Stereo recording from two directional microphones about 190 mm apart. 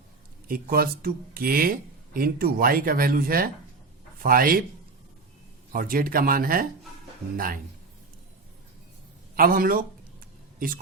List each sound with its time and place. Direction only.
0.4 s speech: 50° right (ahead or behind)
5.7 s speech: 50° right (ahead or behind)
9.3 s speech: 50° right (ahead or behind)